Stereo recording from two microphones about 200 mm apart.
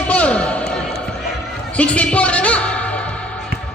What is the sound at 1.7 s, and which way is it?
Music, 5° left (ahead or behind).